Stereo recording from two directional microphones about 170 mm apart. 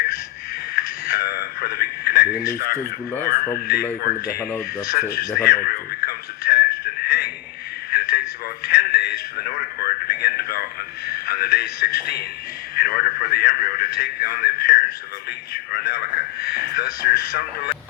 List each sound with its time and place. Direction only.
0.8 s radio: 65° left (ahead or behind)
2.4 s speech: 60° left (ahead or behind)
4.9 s radio: 60° left (ahead or behind)
8.6 s a sound: 70° left (ahead or behind)
12.7 s radio: 60° left (ahead or behind)
15.7 s a sound: 65° left (ahead or behind)